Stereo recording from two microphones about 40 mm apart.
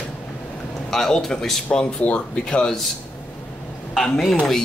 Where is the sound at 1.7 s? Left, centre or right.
Left.